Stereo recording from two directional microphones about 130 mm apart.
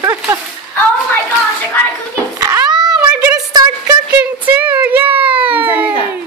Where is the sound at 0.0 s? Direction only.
25° right (ahead or behind).